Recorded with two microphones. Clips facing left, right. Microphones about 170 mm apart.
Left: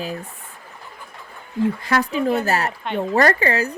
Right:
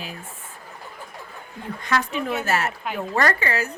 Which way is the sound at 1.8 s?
35° left (ahead or behind).